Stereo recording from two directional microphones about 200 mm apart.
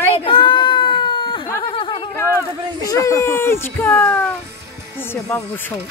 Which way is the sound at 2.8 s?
15° left (ahead or behind).